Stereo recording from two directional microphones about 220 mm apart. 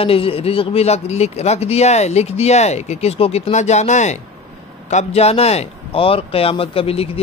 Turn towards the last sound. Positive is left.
turn(degrees=25)  # may be behind; listen again after turning